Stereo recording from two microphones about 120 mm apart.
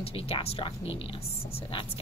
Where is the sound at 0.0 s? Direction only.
55° left (ahead or behind).